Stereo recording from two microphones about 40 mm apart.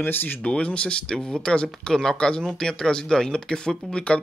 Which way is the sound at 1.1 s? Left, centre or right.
Centre.